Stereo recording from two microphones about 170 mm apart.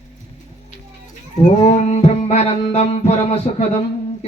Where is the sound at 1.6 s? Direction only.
40° left (ahead or behind).